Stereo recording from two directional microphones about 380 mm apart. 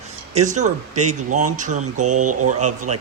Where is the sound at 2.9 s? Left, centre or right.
Centre.